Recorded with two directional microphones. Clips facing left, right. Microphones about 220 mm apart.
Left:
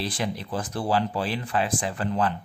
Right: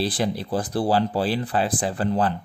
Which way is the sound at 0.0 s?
35° right (ahead or behind).